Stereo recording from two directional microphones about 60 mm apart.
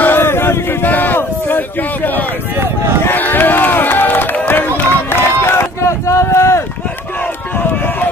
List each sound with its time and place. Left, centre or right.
0.0 s a sound: left
2.5 s run: right
3.2 s run: left
7.5 s run: left